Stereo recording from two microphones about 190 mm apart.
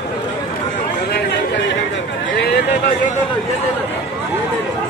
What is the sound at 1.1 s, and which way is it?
Chatter, 60° left (ahead or behind).